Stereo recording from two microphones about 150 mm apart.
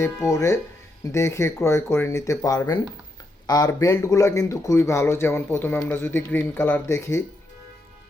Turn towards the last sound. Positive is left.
turn(degrees=15)  # may be behind; listen again after turning